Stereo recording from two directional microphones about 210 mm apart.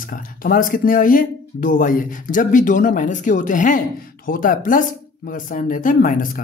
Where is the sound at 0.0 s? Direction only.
40° left (ahead or behind).